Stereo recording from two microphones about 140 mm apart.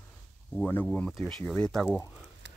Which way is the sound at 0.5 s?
10° left (ahead or behind).